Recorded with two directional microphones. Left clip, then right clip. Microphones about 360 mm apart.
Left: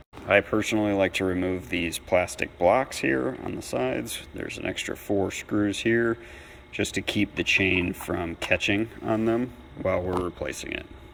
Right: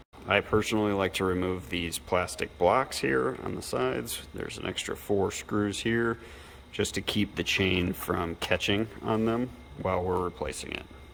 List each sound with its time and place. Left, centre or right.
0.3 s speech: centre